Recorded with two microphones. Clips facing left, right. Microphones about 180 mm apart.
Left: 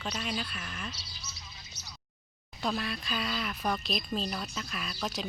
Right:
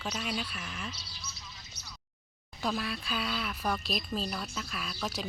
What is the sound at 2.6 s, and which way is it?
Speech, centre (ahead or behind).